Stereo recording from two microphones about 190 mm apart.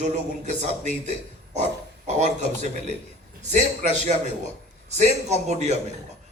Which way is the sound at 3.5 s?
40° right (ahead or behind).